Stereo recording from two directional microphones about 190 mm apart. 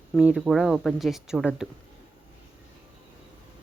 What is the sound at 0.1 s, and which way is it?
Speech, 5° right (ahead or behind).